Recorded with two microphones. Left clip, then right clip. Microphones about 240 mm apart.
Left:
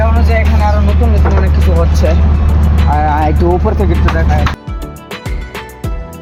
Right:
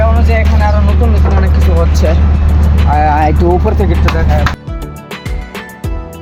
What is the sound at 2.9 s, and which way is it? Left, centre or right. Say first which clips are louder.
Speech: right 3 dB; centre.